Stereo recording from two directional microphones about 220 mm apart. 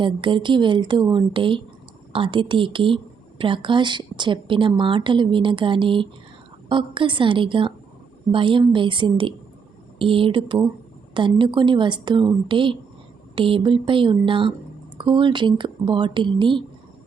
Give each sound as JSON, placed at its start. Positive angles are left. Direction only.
{"t": 0.0, "sound": "speech", "side_deg": -20}